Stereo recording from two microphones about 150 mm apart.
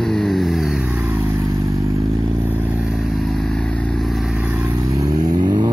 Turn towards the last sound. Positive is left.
turn(degrees=-30)  # may be behind; listen again after turning